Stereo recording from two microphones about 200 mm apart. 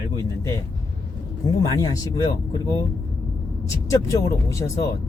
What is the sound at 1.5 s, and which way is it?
Speech, 20° left (ahead or behind).